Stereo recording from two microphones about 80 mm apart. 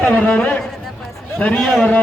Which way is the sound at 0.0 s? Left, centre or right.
Centre.